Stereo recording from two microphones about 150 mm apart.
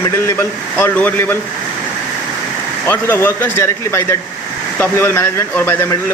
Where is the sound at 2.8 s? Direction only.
15° left (ahead or behind).